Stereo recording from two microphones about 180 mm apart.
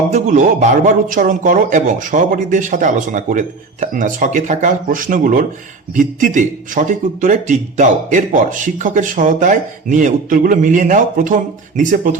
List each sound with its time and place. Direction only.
0.1 s speech: 40° right (ahead or behind)